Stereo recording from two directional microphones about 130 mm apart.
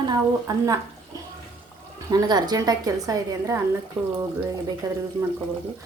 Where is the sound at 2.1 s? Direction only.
30° right (ahead or behind).